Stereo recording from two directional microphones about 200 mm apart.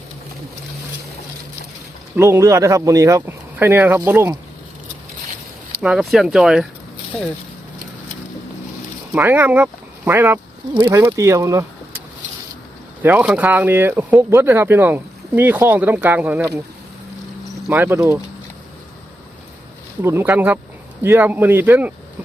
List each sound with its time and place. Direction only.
2.1 s speech: 10° right (ahead or behind)
5.8 s speech: 5° right (ahead or behind)
9.1 s speech: 10° right (ahead or behind)
17.7 s speech: 10° right (ahead or behind)
20.0 s speech: 10° right (ahead or behind)